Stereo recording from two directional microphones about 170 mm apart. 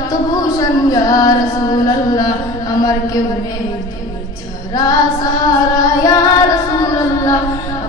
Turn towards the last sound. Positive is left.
turn(degrees=20)  # may be behind; listen again after turning